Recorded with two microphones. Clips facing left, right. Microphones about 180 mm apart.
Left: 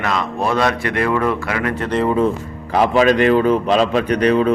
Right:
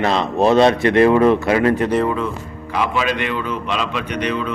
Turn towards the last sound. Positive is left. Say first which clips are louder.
# left 7 dB
turn(degrees=40)  # may be behind; listen again after turning